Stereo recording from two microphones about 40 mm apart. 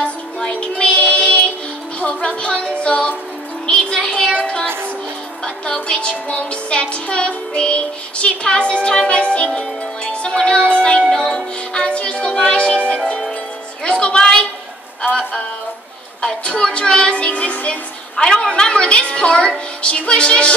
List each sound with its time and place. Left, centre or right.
0.6 s music: left
3.9 s a sound: centre
5.4 s music: left
9.6 s speech: left
11.1 s music: centre
16.4 s music: left